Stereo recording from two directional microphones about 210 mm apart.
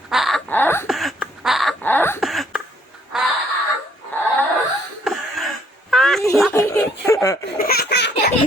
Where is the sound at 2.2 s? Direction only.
Centre (ahead or behind).